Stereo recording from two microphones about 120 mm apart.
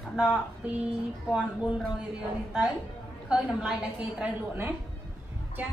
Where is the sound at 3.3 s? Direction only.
5° right (ahead or behind).